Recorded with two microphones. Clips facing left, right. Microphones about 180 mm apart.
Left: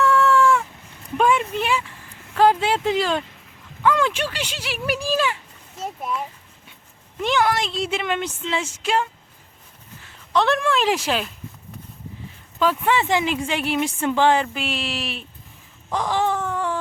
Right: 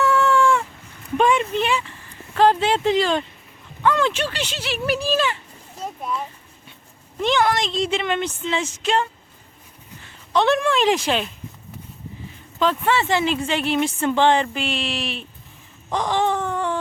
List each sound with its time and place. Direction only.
0.0 s a sound: centre (ahead or behind)
1.2 s a child's voice: 5° left (ahead or behind)
12.5 s speech: 10° left (ahead or behind)
15.9 s baby cry: 5° left (ahead or behind)